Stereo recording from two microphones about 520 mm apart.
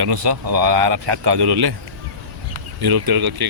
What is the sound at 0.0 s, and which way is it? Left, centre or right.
Speech, right.